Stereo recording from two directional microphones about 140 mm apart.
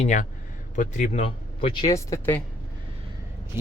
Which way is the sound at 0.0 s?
60° left (ahead or behind).